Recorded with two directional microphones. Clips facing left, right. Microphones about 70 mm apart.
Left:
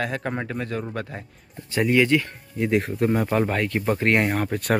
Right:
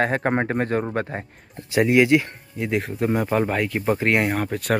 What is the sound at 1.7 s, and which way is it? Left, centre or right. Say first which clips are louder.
Speech: right 3 dB; centre.